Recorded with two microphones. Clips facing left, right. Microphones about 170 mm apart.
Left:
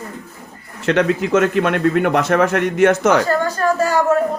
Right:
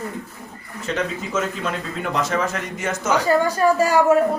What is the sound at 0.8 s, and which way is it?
A man's voice, 70° left (ahead or behind).